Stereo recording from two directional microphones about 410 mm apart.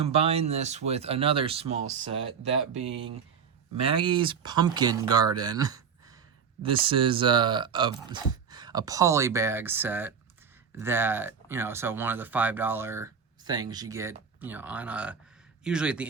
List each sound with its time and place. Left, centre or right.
0.0 s speech: centre